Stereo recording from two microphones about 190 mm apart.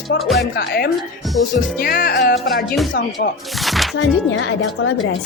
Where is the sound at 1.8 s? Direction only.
50° left (ahead or behind).